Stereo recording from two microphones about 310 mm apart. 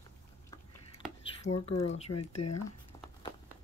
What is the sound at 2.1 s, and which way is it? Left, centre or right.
Speech, left.